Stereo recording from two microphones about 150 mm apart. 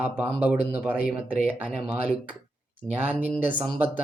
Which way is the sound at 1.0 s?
75° left (ahead or behind).